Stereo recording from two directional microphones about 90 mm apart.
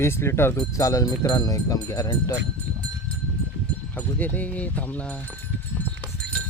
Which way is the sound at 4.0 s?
20° left (ahead or behind).